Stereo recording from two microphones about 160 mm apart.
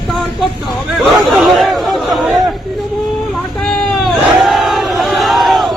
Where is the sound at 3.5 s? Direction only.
Centre (ahead or behind).